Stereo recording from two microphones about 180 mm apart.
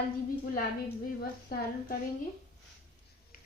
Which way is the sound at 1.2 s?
60° left (ahead or behind).